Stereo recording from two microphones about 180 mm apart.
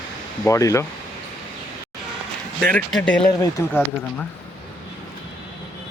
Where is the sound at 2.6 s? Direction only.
5° left (ahead or behind).